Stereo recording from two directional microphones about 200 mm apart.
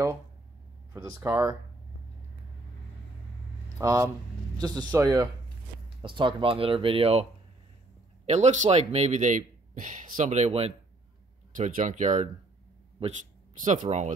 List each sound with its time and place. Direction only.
0.9 s speech: 10° right (ahead or behind)
3.7 s speech: 15° right (ahead or behind)
8.3 s speech: 35° right (ahead or behind)
13.7 s speech: 35° right (ahead or behind)